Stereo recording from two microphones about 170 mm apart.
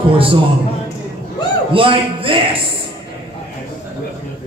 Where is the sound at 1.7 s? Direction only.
30° right (ahead or behind).